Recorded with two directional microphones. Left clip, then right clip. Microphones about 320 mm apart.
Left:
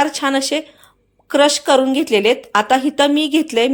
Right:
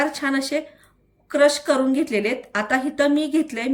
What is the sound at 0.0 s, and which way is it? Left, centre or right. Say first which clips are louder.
A woman's voice: left 6 dB; centre.